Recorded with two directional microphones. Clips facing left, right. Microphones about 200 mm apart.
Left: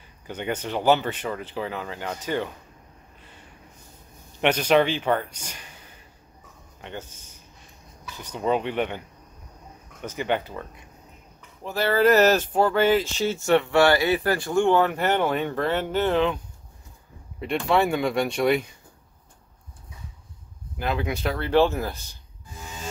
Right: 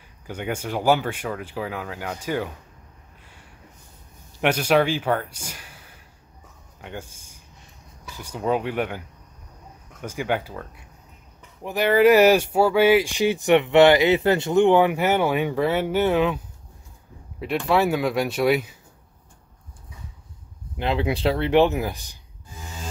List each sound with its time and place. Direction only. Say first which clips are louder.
0.3 s speech: even; 10° right (ahead or behind)
4.4 s speech: even; 10° right (ahead or behind)
10.0 s speech: even; 10° right (ahead or behind)
11.6 s speech: right 3 dB; 15° right (ahead or behind)
20.7 s speech: right 3 dB; 25° right (ahead or behind)